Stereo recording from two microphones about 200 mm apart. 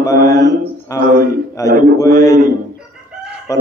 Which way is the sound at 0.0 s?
15° left (ahead or behind).